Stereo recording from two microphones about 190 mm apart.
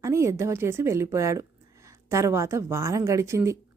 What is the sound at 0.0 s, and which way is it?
Speech, 15° right (ahead or behind).